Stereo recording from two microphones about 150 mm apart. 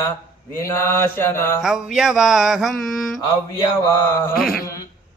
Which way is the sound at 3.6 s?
20° left (ahead or behind).